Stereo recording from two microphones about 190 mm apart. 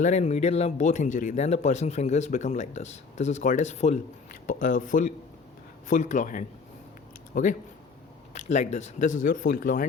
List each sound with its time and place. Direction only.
0.0 s speech: 40° left (ahead or behind)